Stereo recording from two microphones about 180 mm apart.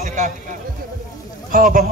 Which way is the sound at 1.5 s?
50° right (ahead or behind).